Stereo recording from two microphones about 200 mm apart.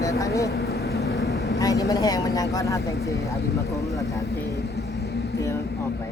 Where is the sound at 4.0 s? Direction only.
15° left (ahead or behind).